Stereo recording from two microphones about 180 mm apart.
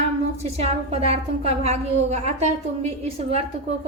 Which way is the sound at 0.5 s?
35° right (ahead or behind).